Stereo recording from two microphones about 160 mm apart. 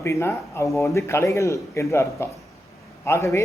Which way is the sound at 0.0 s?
20° left (ahead or behind).